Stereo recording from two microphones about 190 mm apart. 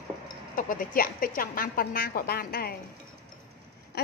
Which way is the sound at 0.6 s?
45° left (ahead or behind).